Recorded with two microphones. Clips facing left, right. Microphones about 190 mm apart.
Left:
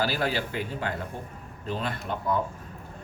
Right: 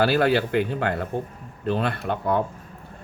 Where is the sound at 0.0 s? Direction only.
65° right (ahead or behind).